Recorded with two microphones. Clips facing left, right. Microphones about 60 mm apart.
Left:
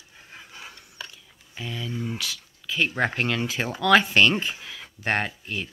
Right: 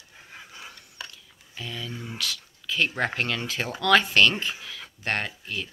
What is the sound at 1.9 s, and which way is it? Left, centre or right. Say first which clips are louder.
Speech: left 3 dB; centre.